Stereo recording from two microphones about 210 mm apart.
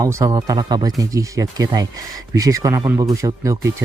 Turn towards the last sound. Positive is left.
turn(degrees=-15)  # may be behind; listen again after turning